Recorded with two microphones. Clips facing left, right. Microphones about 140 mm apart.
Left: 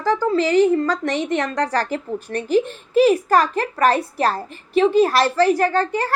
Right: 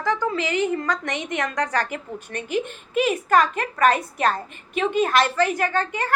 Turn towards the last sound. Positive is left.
turn(degrees=35)  # may be behind; listen again after turning